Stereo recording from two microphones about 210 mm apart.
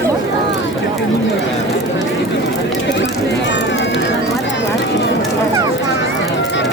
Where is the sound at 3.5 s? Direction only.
55° left (ahead or behind).